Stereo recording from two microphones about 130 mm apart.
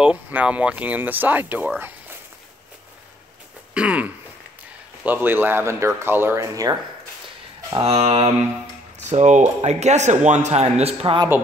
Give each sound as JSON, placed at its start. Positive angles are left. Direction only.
{"t": 0.0, "sound": "speech", "side_deg": -10}
{"t": 3.7, "sound": "speech", "side_deg": -10}
{"t": 7.7, "sound": "speech", "side_deg": -50}
{"t": 9.1, "sound": "speech", "side_deg": -60}